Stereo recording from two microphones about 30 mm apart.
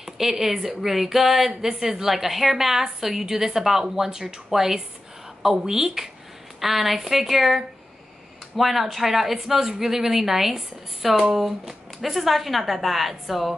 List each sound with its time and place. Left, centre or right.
0.0 s speech: centre